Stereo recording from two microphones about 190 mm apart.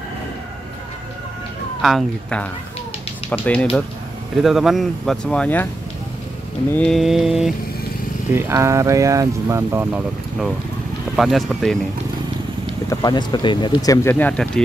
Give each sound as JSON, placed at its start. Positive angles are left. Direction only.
{"t": 1.8, "sound": "speech", "side_deg": 0}
{"t": 6.7, "sound": "speech", "side_deg": 5}
{"t": 8.3, "sound": "speech", "side_deg": -15}
{"t": 12.9, "sound": "speech", "side_deg": 20}
{"t": 14.1, "sound": "speech", "side_deg": 5}